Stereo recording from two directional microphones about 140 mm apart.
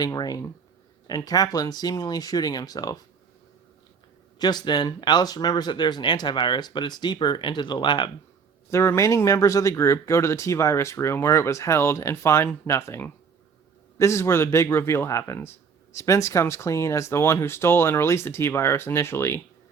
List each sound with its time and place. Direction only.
0.0 s a man's voice: 25° left (ahead or behind)
4.4 s speech: 30° left (ahead or behind)
8.7 s a man's voice: 20° left (ahead or behind)